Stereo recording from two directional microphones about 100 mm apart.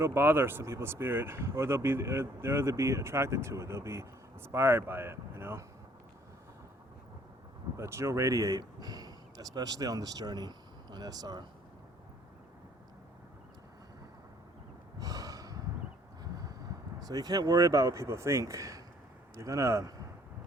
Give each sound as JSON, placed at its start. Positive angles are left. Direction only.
{"t": 0.0, "sound": "speech", "side_deg": -25}
{"t": 7.8, "sound": "speech", "side_deg": -30}
{"t": 14.9, "sound": "a sound", "side_deg": -35}
{"t": 16.2, "sound": "vehicle", "side_deg": -40}
{"t": 17.0, "sound": "speech", "side_deg": -40}